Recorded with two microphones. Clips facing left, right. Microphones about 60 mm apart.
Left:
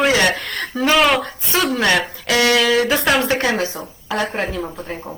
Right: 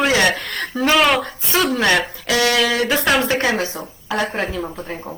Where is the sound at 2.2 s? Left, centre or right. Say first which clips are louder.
Left 3 dB; left.